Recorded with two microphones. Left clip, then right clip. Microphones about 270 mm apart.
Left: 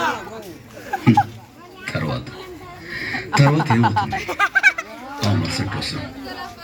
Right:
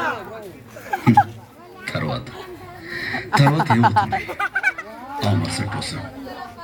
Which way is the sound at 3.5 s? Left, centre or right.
Right.